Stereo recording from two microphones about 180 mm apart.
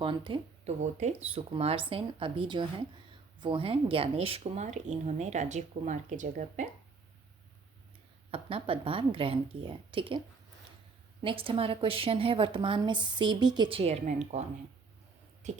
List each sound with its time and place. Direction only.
0.0 s speech: 30° right (ahead or behind)
0.8 s speech: 40° right (ahead or behind)
8.3 s a woman's voice: 30° right (ahead or behind)
15.4 s speech: 40° right (ahead or behind)